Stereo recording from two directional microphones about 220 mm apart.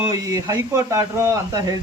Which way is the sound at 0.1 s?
15° right (ahead or behind).